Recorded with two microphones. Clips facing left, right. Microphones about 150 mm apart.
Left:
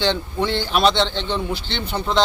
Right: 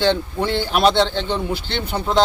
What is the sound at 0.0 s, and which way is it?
A man's voice, 10° right (ahead or behind).